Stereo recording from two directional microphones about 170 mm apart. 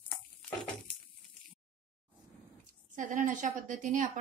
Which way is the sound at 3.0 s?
50° right (ahead or behind).